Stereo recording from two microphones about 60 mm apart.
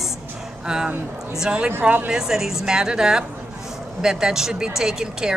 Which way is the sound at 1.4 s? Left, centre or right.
Centre.